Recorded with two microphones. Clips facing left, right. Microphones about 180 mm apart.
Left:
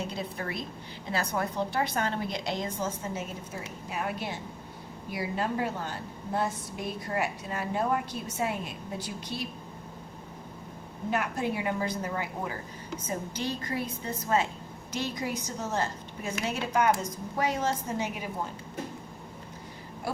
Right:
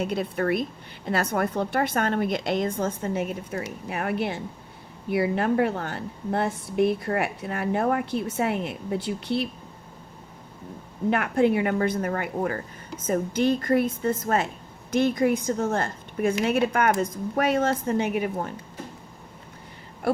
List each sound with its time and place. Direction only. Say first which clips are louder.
0.0 s a woman's voice: right 9 dB; 60° right (ahead or behind)
11.1 s a woman's voice: right 8 dB; 60° right (ahead or behind)